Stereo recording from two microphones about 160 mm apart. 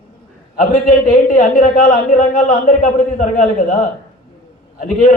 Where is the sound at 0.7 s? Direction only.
55° left (ahead or behind).